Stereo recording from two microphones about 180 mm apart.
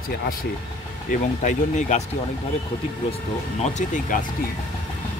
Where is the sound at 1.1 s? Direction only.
45° left (ahead or behind).